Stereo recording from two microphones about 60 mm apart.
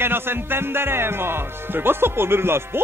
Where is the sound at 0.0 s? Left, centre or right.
Right.